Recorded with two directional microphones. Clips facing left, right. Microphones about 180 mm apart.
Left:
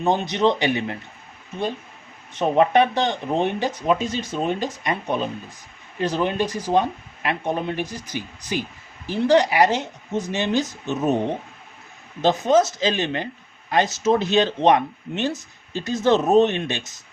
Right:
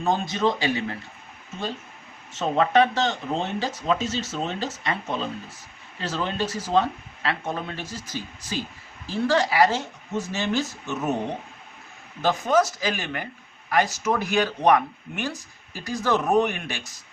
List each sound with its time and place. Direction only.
0.0 s speech: 20° left (ahead or behind)
2.3 s speech: 15° left (ahead or behind)
12.2 s speech: 20° left (ahead or behind)